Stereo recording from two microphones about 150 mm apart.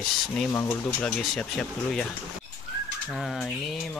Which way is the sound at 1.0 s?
5° left (ahead or behind).